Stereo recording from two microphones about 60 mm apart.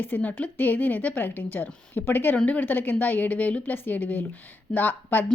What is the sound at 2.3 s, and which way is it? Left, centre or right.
A woman's voice, left.